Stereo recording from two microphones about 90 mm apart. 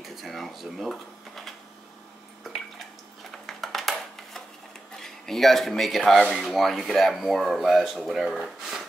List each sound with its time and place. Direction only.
0.0 s drawer open or close: centre (ahead or behind)
3.3 s a sound: centre (ahead or behind)
4.9 s speech: 5° left (ahead or behind)